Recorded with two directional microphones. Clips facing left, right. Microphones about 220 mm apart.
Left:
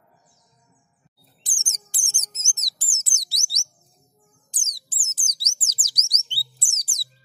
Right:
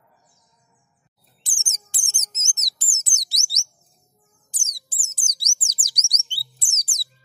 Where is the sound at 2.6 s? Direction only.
20° right (ahead or behind).